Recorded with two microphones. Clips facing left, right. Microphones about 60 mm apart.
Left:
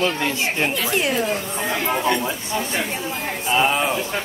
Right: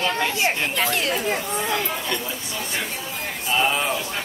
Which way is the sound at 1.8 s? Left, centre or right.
Left.